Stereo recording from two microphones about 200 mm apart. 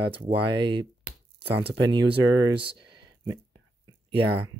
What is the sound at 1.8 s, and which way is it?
Speech, 20° right (ahead or behind).